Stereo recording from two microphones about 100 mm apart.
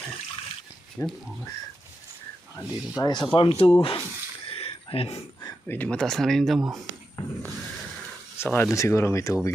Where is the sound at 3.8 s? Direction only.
65° left (ahead or behind).